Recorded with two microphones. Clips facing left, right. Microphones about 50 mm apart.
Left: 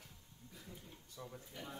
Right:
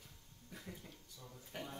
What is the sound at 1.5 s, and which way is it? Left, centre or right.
Speech, right.